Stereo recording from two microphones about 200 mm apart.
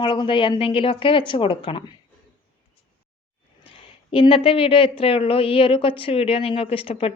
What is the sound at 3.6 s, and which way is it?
A woman's voice, 30° left (ahead or behind).